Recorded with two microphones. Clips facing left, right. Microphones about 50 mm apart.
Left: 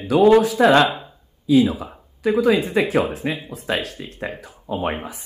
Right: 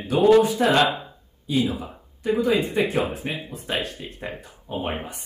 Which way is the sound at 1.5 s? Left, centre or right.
Centre.